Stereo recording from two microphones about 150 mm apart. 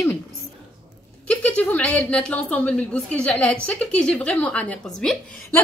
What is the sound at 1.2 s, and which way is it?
Speech, 10° left (ahead or behind).